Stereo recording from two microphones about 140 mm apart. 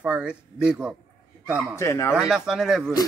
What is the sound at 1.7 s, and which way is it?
Speech, 20° left (ahead or behind).